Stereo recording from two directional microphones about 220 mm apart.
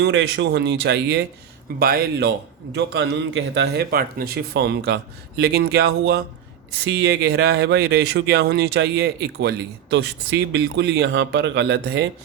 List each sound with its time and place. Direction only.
0.0 s speech: 60° right (ahead or behind)